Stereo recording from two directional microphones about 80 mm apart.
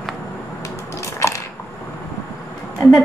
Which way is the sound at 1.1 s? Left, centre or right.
Left.